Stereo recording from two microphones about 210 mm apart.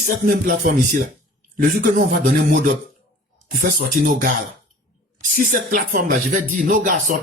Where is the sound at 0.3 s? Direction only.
40° right (ahead or behind).